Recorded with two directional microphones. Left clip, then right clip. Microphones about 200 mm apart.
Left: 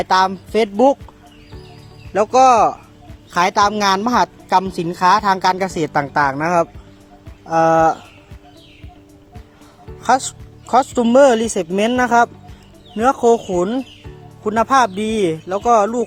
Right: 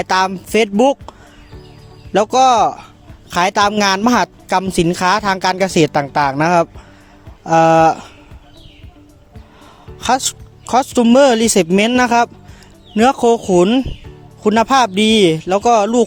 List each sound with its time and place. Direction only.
0.0 s a woman's voice: 50° right (ahead or behind)
2.1 s a woman's voice: 50° right (ahead or behind)
10.0 s a woman's voice: 50° right (ahead or behind)